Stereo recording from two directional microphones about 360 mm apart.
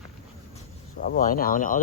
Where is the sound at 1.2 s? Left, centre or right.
Left.